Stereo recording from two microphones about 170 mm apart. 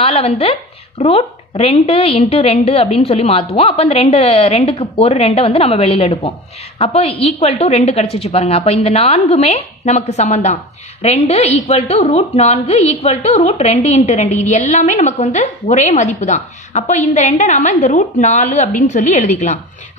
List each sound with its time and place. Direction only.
0.0 s a woman's voice: 35° left (ahead or behind)